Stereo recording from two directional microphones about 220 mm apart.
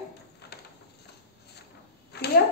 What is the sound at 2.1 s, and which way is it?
Speech, 50° left (ahead or behind).